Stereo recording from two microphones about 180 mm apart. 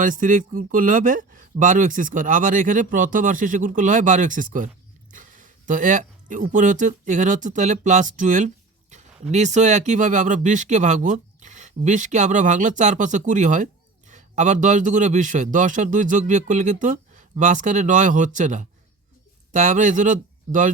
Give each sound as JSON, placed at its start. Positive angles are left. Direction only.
{"t": 0.0, "sound": "speech", "side_deg": -45}